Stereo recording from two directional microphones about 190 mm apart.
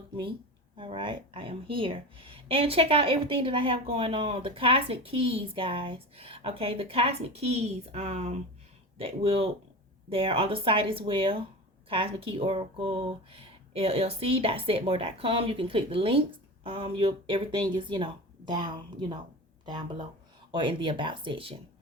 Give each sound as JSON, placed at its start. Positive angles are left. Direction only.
{"t": 0.8, "sound": "speech", "side_deg": -25}